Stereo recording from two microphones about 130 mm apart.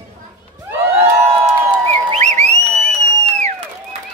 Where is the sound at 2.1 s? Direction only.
60° right (ahead or behind).